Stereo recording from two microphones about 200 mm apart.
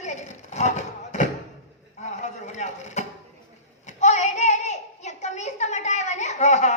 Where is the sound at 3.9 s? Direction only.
35° left (ahead or behind).